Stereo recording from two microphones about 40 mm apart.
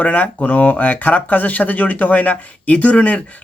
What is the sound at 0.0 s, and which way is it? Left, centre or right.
Speech, left.